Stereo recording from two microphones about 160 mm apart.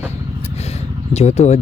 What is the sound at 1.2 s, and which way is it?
Speech, 45° left (ahead or behind).